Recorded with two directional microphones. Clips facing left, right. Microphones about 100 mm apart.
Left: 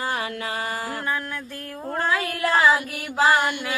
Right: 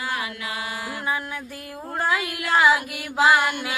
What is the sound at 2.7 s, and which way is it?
Music, 35° left (ahead or behind).